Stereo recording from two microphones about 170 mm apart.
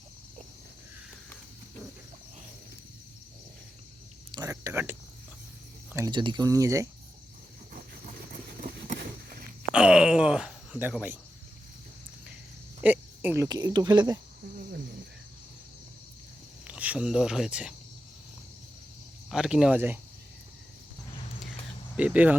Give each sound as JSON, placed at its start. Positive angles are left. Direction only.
{"t": 4.3, "sound": "cricket", "side_deg": -20}
{"t": 6.1, "sound": "speech", "side_deg": -25}
{"t": 8.6, "sound": "a sound", "side_deg": -55}
{"t": 9.7, "sound": "groan", "side_deg": -5}
{"t": 12.8, "sound": "speech", "side_deg": -10}
{"t": 16.6, "sound": "speech", "side_deg": -10}
{"t": 19.3, "sound": "speech", "side_deg": -5}
{"t": 21.9, "sound": "speech", "side_deg": -10}